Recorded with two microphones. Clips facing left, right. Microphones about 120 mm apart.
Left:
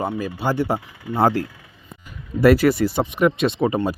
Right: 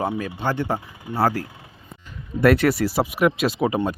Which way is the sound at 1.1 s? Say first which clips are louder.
Left 3 dB; 20° left (ahead or behind).